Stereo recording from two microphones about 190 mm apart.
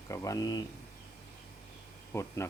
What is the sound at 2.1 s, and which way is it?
Speech, 15° left (ahead or behind).